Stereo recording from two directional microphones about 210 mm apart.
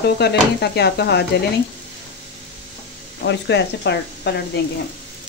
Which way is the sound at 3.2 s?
55° left (ahead or behind).